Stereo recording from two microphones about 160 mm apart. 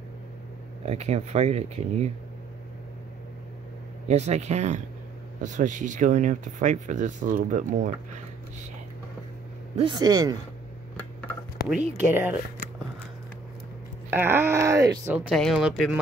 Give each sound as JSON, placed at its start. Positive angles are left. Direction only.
{"t": 0.8, "sound": "speech", "side_deg": -45}
{"t": 4.1, "sound": "speech", "side_deg": -45}
{"t": 9.8, "sound": "speech", "side_deg": -25}
{"t": 12.1, "sound": "speech", "side_deg": -10}
{"t": 14.1, "sound": "speech", "side_deg": -15}
{"t": 15.1, "sound": "speech", "side_deg": 0}